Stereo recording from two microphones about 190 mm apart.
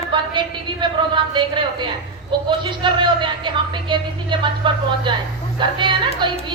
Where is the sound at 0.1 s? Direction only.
25° right (ahead or behind).